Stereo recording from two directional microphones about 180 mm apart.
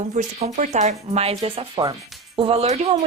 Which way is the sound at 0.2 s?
40° right (ahead or behind).